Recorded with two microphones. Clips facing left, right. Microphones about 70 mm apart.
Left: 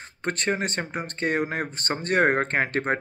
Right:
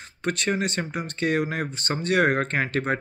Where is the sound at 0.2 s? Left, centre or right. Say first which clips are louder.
Right 1 dB; left.